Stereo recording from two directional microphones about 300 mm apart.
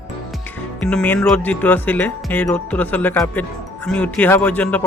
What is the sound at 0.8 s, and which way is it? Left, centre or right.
Speech, centre.